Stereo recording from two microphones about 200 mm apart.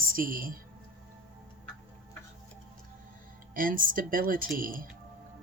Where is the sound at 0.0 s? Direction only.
45° right (ahead or behind).